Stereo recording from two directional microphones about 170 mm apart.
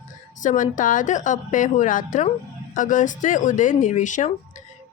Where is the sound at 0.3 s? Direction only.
50° left (ahead or behind).